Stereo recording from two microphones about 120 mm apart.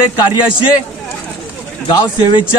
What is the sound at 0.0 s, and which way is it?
Speech, 40° left (ahead or behind).